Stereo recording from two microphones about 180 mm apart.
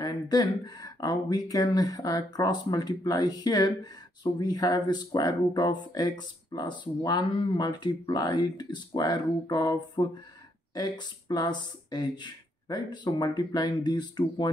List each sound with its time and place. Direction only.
0.0 s speech: 20° left (ahead or behind)